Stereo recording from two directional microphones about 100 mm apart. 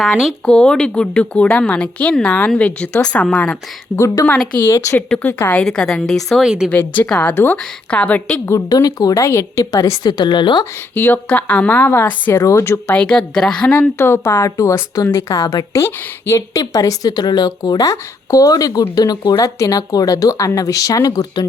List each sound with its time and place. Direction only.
0.0 s speech: centre (ahead or behind)
0.5 s a woman's voice: 10° left (ahead or behind)
4.5 s speech: 25° left (ahead or behind)
5.0 s a woman's voice: 10° left (ahead or behind)
5.3 s speech: 20° left (ahead or behind)
5.5 s a woman's voice: 10° left (ahead or behind)
6.7 s a woman's voice: 15° left (ahead or behind)
8.7 s speech: 40° left (ahead or behind)
10.9 s a woman's voice: 15° left (ahead or behind)
12.9 s a woman's voice: 10° left (ahead or behind); by 21.4 s 40° left (ahead or behind)